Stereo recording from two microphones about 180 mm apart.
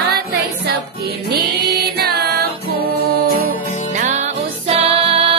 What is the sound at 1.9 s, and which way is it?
Music, 65° right (ahead or behind).